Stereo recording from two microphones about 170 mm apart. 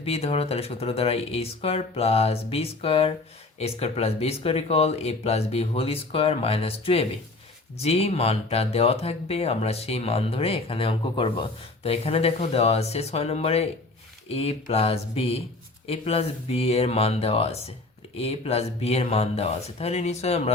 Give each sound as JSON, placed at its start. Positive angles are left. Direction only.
{"t": 0.0, "sound": "speech", "side_deg": 35}